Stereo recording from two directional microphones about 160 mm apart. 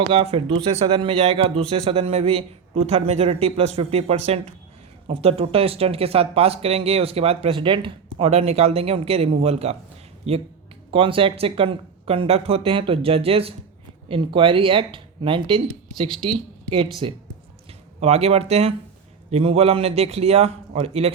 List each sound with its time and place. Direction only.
0.1 s speech: 35° right (ahead or behind)
16.0 s speech: centre (ahead or behind)
16.6 s speech: 35° right (ahead or behind)